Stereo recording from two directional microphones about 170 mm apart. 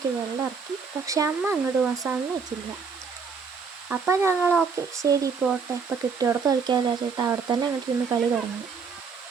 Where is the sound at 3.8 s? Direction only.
10° right (ahead or behind).